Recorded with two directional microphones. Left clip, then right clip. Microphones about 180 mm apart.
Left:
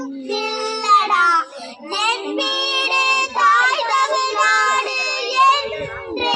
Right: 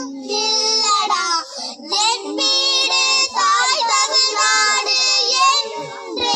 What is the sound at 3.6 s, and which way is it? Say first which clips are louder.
Child singing: even; 15° right (ahead or behind).